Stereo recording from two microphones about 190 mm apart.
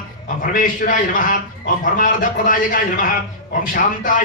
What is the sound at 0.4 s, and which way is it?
A man's voice, 45° left (ahead or behind).